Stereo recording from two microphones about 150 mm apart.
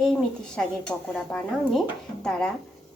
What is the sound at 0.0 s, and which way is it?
Speech, 5° left (ahead or behind).